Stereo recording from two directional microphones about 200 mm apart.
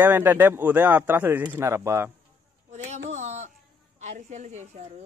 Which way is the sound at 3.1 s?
35° right (ahead or behind).